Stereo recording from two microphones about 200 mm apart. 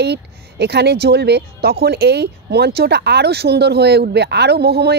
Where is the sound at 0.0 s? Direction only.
55° right (ahead or behind).